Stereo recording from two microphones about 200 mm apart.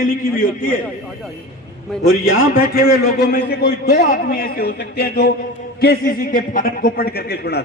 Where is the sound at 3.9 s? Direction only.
45° left (ahead or behind).